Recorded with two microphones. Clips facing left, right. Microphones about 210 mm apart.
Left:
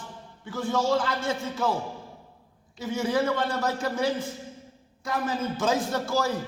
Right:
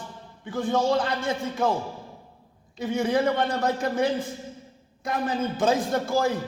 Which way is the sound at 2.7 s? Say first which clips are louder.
Right 3 dB; 60° right (ahead or behind).